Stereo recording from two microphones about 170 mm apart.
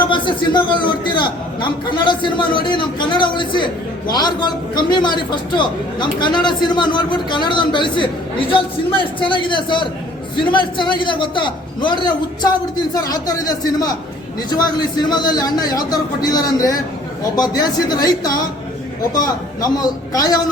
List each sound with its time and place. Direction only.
0.5 s a man's voice: 30° left (ahead or behind)